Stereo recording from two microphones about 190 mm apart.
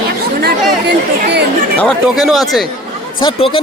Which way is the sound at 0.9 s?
60° right (ahead or behind).